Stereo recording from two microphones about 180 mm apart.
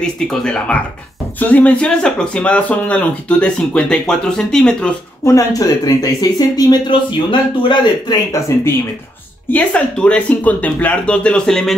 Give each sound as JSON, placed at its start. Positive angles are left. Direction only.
{"t": 0.0, "sound": "speech", "side_deg": 5}
{"t": 5.2, "sound": "speech", "side_deg": 20}